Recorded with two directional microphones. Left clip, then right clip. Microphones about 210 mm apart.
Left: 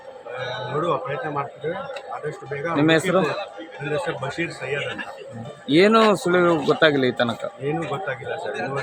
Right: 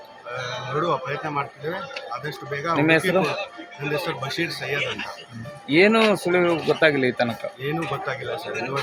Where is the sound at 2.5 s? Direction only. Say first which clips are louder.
Even; centre (ahead or behind).